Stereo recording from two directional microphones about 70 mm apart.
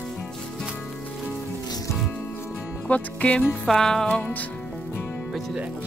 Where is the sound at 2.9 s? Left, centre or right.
Centre.